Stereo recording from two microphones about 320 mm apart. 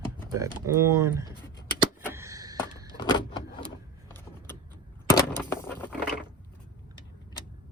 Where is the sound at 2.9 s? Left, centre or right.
Centre.